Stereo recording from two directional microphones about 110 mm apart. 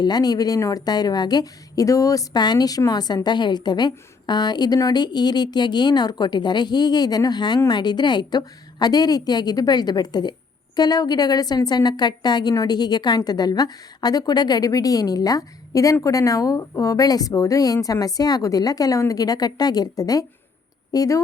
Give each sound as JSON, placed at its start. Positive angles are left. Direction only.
{"t": 0.0, "sound": "a woman's voice", "side_deg": 40}